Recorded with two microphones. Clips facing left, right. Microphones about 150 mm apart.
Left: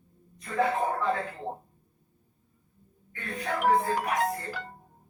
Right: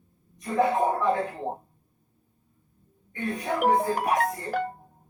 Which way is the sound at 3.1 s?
20° right (ahead or behind).